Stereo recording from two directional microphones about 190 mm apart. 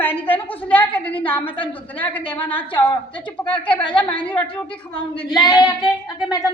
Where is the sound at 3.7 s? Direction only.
25° left (ahead or behind).